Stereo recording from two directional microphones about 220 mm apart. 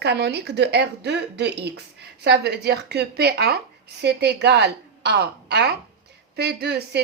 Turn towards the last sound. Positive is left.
turn(degrees=-45)  # may be behind; listen again after turning